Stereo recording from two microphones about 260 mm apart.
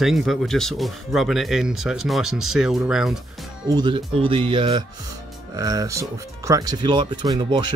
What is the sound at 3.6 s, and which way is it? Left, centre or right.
Speech, centre.